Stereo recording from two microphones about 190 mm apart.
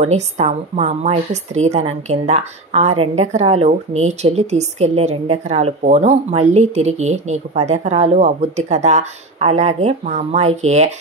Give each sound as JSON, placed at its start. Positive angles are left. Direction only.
{"t": 0.0, "sound": "a woman's voice", "side_deg": -35}